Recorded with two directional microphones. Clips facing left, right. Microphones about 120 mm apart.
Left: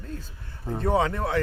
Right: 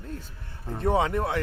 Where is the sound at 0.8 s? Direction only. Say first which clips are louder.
Even; 20° right (ahead or behind).